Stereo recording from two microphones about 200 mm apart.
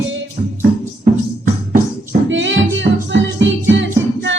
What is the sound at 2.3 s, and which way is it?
Music, 70° right (ahead or behind).